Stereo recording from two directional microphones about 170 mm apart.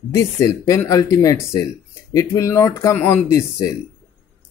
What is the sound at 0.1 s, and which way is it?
Speech, 20° left (ahead or behind).